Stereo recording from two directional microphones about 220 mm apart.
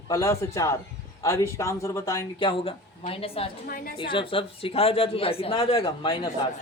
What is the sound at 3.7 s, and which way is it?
Speech, 40° left (ahead or behind).